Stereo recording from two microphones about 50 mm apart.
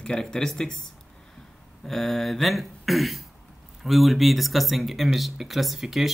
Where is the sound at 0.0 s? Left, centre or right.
Centre.